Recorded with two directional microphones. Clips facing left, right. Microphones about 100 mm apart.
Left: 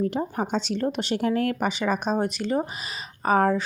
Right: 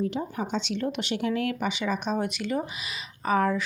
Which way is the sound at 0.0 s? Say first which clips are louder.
Left 3 dB; 45° left (ahead or behind).